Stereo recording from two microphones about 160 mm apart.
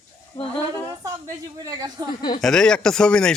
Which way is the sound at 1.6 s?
25° right (ahead or behind).